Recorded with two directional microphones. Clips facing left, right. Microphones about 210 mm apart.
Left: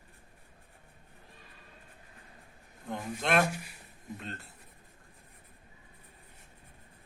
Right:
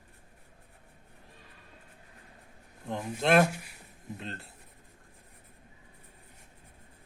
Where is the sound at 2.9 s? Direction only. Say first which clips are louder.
Right 4 dB; 30° right (ahead or behind).